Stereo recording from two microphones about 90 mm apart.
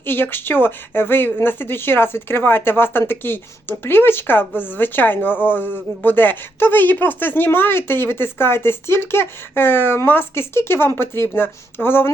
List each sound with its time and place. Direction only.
0.0 s speech: 25° left (ahead or behind)